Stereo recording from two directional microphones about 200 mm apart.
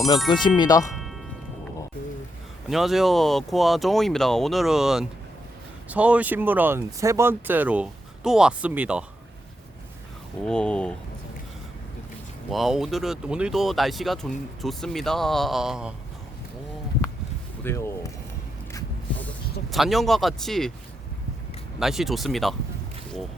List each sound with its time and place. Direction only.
0.4 s speech: 20° left (ahead or behind)
2.6 s speech: centre (ahead or behind)
10.4 s speech: 5° left (ahead or behind)
12.5 s speech: centre (ahead or behind)
17.6 s speech: 15° left (ahead or behind)
19.7 s speech: centre (ahead or behind)
21.8 s speech: centre (ahead or behind)